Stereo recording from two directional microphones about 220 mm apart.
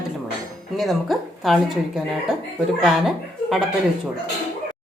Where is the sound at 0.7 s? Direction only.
Centre (ahead or behind).